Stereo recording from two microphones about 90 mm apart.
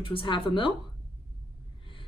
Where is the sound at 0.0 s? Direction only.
70° left (ahead or behind).